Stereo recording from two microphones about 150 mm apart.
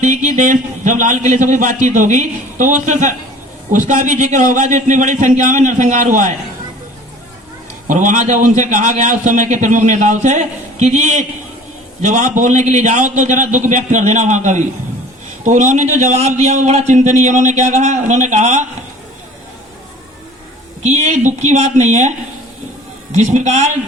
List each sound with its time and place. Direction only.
0.0 s a man's voice: 55° right (ahead or behind)
7.9 s a man's voice: 55° right (ahead or behind)
20.8 s a man's voice: 50° right (ahead or behind)
23.1 s a man's voice: 50° right (ahead or behind)